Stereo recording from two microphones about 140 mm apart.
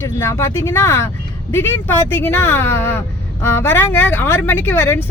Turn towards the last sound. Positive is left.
turn(degrees=15)  # may be behind; listen again after turning